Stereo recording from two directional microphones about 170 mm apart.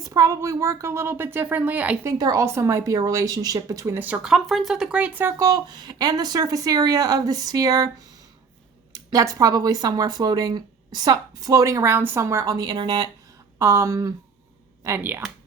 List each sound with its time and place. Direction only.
0.0 s speech: 20° right (ahead or behind)
2.1 s speech: 20° right (ahead or behind)
8.9 s speech: 20° right (ahead or behind)